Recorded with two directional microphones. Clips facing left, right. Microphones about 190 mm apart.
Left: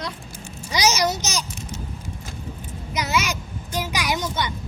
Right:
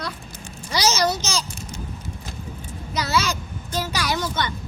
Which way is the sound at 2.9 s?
15° left (ahead or behind).